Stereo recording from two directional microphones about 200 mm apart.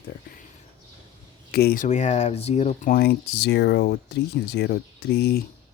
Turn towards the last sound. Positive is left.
turn(degrees=55)  # may be behind; listen again after turning